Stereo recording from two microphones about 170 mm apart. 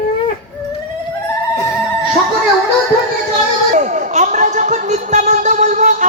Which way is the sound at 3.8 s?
45° right (ahead or behind).